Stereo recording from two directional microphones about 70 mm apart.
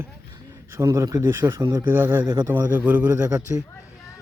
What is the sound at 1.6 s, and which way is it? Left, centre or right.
Speech, right.